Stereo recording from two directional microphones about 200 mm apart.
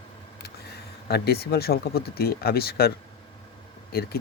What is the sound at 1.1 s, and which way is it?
Speech, 55° left (ahead or behind).